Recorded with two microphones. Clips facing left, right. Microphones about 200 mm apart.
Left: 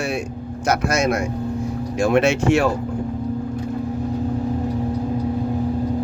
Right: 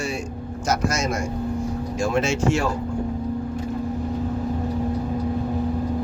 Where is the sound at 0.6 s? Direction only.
60° left (ahead or behind).